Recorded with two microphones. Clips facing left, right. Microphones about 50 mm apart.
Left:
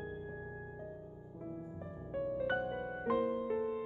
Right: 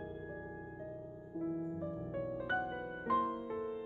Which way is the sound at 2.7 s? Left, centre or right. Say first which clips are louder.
Even; centre.